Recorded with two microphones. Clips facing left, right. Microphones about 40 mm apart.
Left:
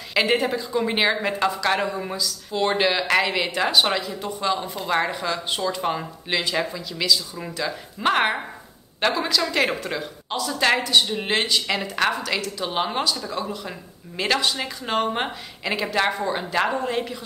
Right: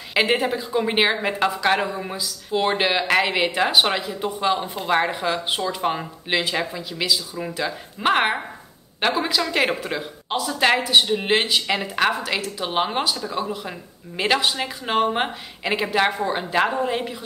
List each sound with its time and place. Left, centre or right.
0.1 s a woman's voice: centre
1.9 s speech: centre
2.1 s speech: centre